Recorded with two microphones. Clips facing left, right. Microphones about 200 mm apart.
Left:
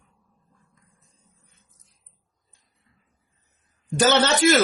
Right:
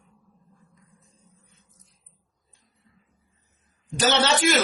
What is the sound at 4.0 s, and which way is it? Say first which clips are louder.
Speech: left 3 dB; 50° left (ahead or behind).